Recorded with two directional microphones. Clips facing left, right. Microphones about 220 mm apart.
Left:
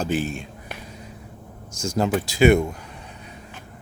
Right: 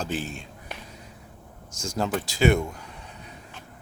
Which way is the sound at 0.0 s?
10° left (ahead or behind).